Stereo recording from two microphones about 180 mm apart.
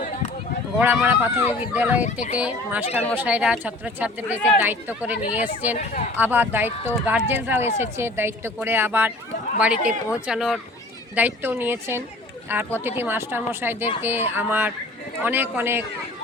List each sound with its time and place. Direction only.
0.8 s speech: 10° right (ahead or behind)
2.8 s speech: 35° left (ahead or behind)
3.2 s speech: 5° right (ahead or behind)